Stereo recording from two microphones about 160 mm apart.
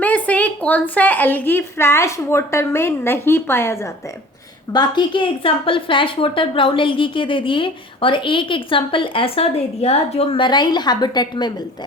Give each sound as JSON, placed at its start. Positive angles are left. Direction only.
{"t": 0.0, "sound": "a woman's voice", "side_deg": 10}
{"t": 4.7, "sound": "a woman's voice", "side_deg": 25}